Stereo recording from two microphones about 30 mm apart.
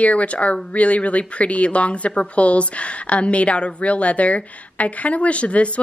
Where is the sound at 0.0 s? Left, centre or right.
Left.